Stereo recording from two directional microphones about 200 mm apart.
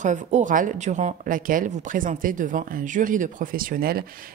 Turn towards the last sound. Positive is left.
turn(degrees=-45)  # may be behind; listen again after turning